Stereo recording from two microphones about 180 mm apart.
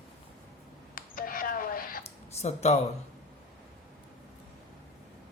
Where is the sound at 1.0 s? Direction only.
50° left (ahead or behind).